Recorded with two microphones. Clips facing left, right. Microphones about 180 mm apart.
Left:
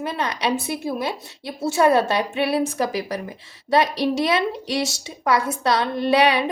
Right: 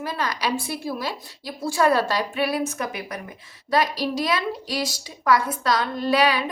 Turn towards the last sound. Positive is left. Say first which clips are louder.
# left 3 dB
turn(degrees=25)  # may be behind; listen again after turning